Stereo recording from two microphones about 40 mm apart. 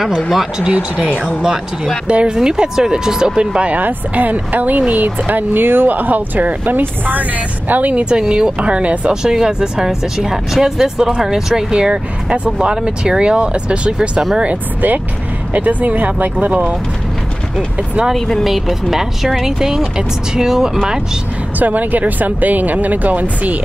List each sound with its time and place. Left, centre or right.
0.3 s speech: centre
2.0 s speech: right
3.3 s speech: right
3.7 s speech: right
7.9 s speech: right
8.5 s speech: right
9.1 s speech: centre; by 16.6 s right
18.1 s speech: centre
18.4 s speech: centre
21.5 s speech: right